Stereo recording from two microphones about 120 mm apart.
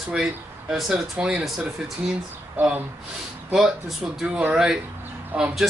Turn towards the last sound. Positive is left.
turn(degrees=-5)  # may be behind; listen again after turning